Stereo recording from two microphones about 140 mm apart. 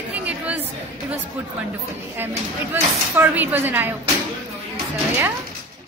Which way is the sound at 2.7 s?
15° right (ahead or behind).